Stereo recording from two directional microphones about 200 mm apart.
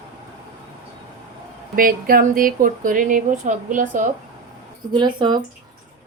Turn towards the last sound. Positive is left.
turn(degrees=-20)  # may be behind; listen again after turning